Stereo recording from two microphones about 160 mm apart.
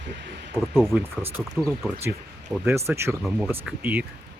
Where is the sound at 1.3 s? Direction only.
10° right (ahead or behind).